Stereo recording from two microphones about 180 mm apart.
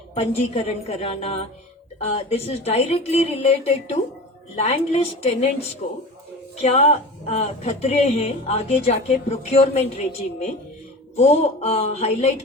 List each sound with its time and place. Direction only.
0.1 s speech: 35° left (ahead or behind)